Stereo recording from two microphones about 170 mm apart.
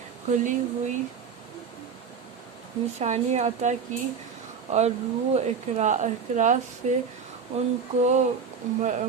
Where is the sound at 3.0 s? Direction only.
40° right (ahead or behind).